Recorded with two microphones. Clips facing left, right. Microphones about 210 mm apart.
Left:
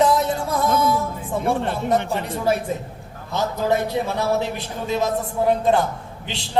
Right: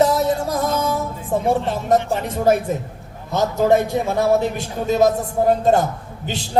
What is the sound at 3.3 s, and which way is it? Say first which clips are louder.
Speech: right 5 dB; 50° right (ahead or behind).